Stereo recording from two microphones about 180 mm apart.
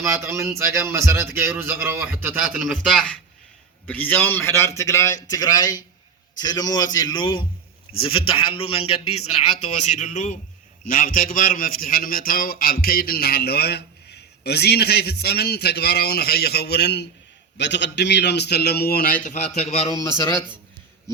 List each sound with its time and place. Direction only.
0.0 s a man's voice: 15° right (ahead or behind); by 19.4 s 45° left (ahead or behind)
19.5 s a man's voice: 35° left (ahead or behind)